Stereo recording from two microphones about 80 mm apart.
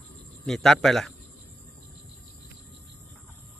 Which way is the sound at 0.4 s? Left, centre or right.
Centre.